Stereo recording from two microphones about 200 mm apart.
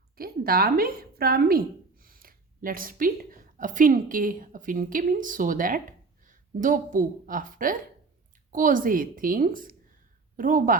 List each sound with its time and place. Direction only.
0.2 s a woman's voice: 50° right (ahead or behind)